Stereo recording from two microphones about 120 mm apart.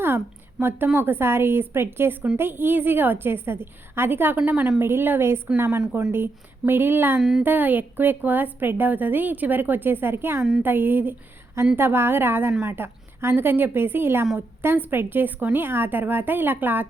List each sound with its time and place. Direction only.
0.6 s speech: 5° right (ahead or behind)
0.9 s a woman's voice: 20° right (ahead or behind)
7.2 s speech: centre (ahead or behind)
7.4 s a woman's voice: 15° right (ahead or behind)